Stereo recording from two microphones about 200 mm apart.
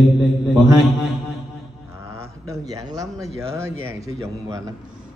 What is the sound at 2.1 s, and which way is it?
A man's voice, 15° right (ahead or behind).